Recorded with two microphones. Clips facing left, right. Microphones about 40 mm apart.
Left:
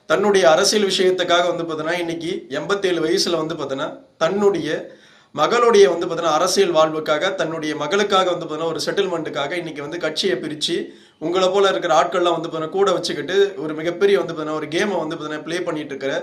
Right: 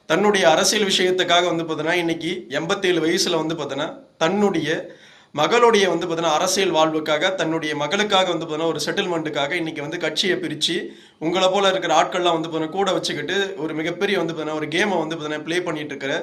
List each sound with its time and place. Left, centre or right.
0.3 s a man's voice: right
4.3 s a man's voice: right